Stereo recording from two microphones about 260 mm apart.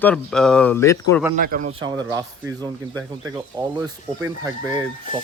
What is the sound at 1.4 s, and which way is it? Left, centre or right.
Speech, right.